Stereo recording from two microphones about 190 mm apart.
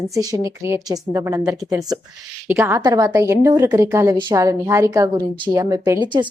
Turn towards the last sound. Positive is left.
turn(degrees=-25)  # may be behind; listen again after turning